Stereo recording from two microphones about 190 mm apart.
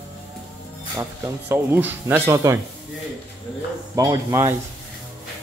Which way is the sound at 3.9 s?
20° right (ahead or behind).